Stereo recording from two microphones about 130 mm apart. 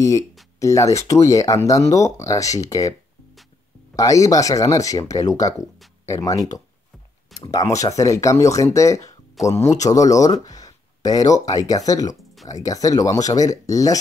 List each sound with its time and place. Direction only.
0.6 s speech: 25° left (ahead or behind)
3.9 s speech: 25° left (ahead or behind)